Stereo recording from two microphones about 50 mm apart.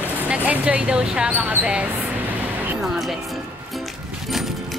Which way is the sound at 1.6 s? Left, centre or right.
Right.